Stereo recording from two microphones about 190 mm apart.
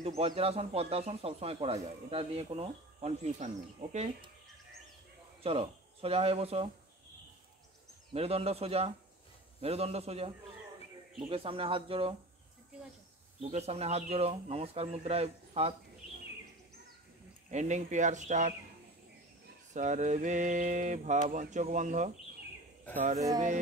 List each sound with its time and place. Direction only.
0.0 s speech: 30° right (ahead or behind)
5.4 s speech: 30° right (ahead or behind)
8.1 s speech: 30° right (ahead or behind)
13.4 s speech: 35° right (ahead or behind)
17.5 s speech: 40° right (ahead or behind)
19.7 s speech: 40° right (ahead or behind)